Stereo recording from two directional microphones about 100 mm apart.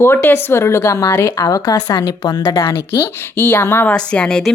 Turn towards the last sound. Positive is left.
turn(degrees=10)  # may be behind; listen again after turning